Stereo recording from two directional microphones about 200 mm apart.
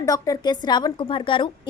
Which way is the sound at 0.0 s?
20° left (ahead or behind).